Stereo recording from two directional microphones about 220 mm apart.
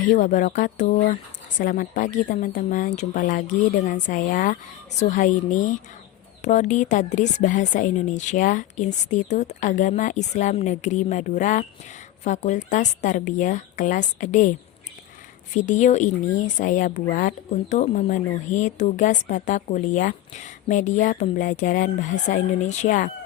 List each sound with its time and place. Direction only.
0.1 s speech: 35° left (ahead or behind)
15.5 s speech: 35° left (ahead or behind)